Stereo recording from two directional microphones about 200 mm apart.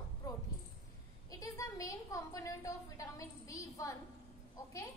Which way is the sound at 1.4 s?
15° left (ahead or behind).